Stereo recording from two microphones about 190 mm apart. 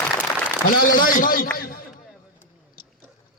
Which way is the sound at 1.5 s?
50° left (ahead or behind).